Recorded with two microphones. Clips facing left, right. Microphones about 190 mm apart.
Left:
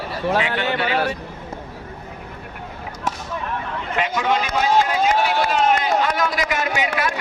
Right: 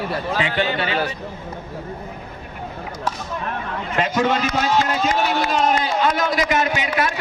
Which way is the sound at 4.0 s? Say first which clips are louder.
Right 2 dB; 45° right (ahead or behind).